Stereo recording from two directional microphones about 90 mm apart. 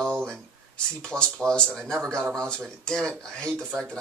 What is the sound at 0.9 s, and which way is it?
Speech, 10° left (ahead or behind).